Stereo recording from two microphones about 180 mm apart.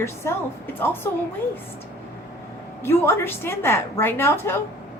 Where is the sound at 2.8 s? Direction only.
15° left (ahead or behind).